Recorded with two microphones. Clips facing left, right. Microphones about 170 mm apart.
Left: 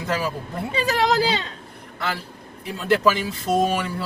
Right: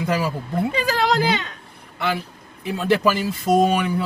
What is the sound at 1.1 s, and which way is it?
Speech, 30° left (ahead or behind).